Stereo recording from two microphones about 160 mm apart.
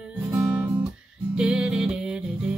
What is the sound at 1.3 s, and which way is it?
Music, 5° right (ahead or behind).